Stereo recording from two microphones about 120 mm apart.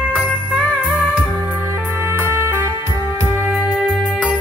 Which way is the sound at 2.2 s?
20° right (ahead or behind).